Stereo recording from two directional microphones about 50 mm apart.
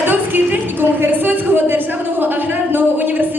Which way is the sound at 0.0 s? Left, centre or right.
Right.